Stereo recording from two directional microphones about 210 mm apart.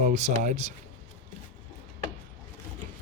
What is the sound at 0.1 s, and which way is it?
Speech, 35° right (ahead or behind).